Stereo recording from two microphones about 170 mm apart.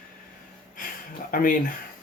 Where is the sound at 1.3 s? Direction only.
55° left (ahead or behind).